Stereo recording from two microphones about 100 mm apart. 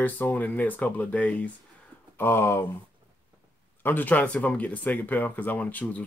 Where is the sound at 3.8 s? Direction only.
20° left (ahead or behind).